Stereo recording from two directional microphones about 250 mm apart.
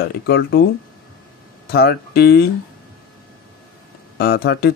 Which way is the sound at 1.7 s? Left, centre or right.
Left.